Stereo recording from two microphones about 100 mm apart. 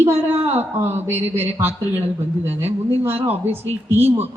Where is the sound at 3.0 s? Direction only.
20° right (ahead or behind).